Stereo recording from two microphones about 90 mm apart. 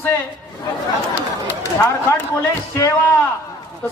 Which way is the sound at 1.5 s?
25° left (ahead or behind).